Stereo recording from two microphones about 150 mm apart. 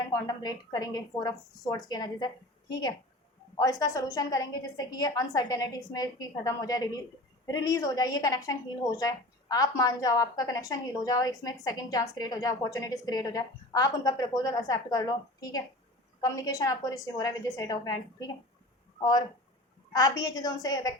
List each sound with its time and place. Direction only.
0.1 s a woman's voice: 25° left (ahead or behind)
19.9 s a woman's voice: 25° left (ahead or behind)